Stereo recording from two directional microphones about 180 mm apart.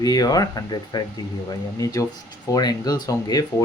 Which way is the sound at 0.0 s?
20° left (ahead or behind).